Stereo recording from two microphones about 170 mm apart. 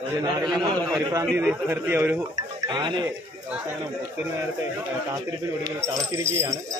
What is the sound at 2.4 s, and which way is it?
Music, 25° right (ahead or behind).